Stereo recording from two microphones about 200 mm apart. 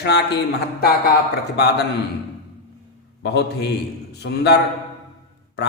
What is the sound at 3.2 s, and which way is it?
A man's voice, 60° left (ahead or behind).